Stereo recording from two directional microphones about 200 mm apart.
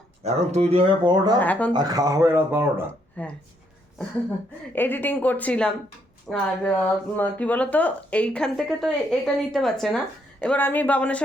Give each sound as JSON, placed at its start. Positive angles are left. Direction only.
{"t": 0.2, "sound": "speech", "side_deg": -35}
{"t": 1.4, "sound": "a woman's voice", "side_deg": 10}
{"t": 1.7, "sound": "speech", "side_deg": -20}
{"t": 3.2, "sound": "a woman's voice", "side_deg": 5}
{"t": 4.7, "sound": "a woman's voice", "side_deg": 10}